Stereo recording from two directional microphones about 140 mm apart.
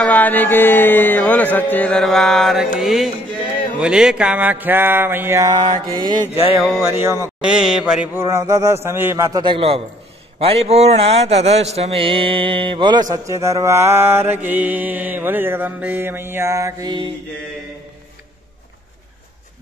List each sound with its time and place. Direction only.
0.0 s music: 10° left (ahead or behind)
3.8 s mantra: 5° right (ahead or behind)
5.9 s a man's voice: 30° right (ahead or behind)
6.8 s a man's voice: 20° right (ahead or behind)
7.4 s mantra: 5° right (ahead or behind); by 9.4 s 20° right (ahead or behind)
9.4 s a man's voice: 40° right (ahead or behind)
10.4 s mantra: 45° right (ahead or behind)
13.1 s mantra: 20° right (ahead or behind)